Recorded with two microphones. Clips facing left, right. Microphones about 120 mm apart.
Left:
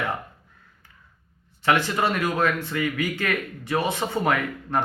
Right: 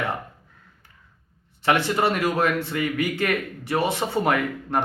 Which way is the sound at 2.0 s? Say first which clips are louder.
Right 1 dB; 25° right (ahead or behind).